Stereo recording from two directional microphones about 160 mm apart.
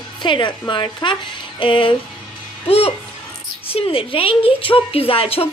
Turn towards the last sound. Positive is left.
turn(degrees=35)  # may be behind; listen again after turning